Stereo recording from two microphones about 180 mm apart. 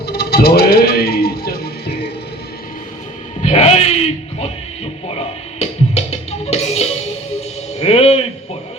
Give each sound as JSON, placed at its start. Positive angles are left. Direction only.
{"t": 0.0, "sound": "music", "side_deg": 65}
{"t": 3.4, "sound": "music", "side_deg": 40}